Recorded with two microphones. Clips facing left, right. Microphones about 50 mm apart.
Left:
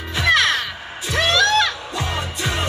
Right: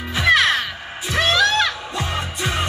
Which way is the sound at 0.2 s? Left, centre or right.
Centre.